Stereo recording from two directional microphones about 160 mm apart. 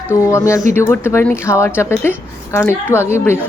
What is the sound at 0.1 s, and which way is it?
A woman's voice, 20° left (ahead or behind).